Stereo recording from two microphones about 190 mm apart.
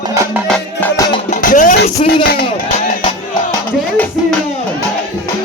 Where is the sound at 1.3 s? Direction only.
40° left (ahead or behind).